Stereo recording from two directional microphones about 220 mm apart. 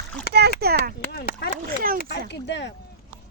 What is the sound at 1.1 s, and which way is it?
Speech, 50° left (ahead or behind).